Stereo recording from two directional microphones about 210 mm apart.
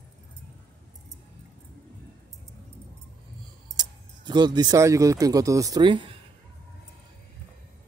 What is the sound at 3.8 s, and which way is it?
Speech, 20° right (ahead or behind).